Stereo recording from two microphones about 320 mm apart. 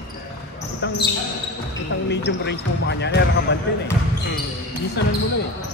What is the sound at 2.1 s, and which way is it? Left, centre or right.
Speech, left.